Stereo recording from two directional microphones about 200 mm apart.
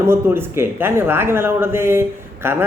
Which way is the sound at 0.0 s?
10° right (ahead or behind).